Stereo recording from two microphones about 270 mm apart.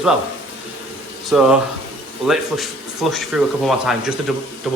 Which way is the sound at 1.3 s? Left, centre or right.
Centre.